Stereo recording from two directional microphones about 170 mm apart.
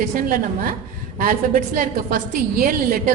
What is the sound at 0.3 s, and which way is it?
A woman's voice, 55° right (ahead or behind).